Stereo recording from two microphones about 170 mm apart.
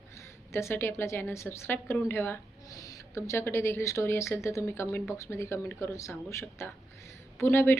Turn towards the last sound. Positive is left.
turn(degrees=15)  # may be behind; listen again after turning